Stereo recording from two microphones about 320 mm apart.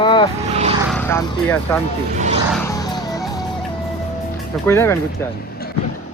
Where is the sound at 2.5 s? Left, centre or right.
Centre.